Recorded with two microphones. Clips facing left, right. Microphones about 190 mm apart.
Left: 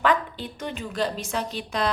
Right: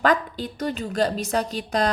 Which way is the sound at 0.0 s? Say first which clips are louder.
Right 2 dB; 40° right (ahead or behind).